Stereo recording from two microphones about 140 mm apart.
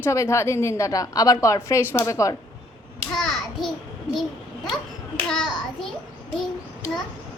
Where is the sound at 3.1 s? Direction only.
Centre (ahead or behind).